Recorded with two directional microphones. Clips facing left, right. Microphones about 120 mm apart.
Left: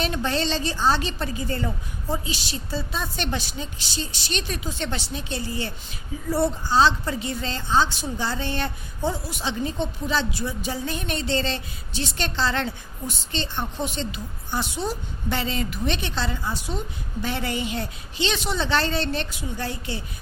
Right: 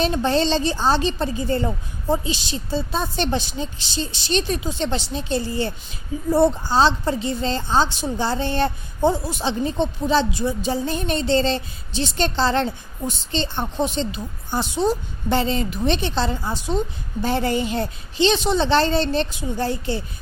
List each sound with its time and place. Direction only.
0.0 s a woman's voice: 30° right (ahead or behind)